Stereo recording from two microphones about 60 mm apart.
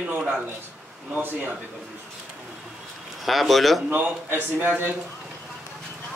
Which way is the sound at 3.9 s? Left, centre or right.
Right.